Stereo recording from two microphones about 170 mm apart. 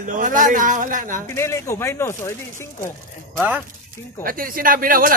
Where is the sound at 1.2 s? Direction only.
15° left (ahead or behind).